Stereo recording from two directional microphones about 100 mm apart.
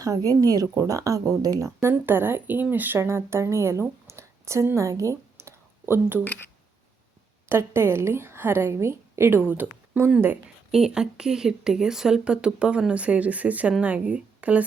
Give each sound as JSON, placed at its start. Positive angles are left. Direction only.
{"t": 0.0, "sound": "speech", "side_deg": -35}
{"t": 7.4, "sound": "a woman's voice", "side_deg": -25}
{"t": 10.7, "sound": "a woman's voice", "side_deg": -5}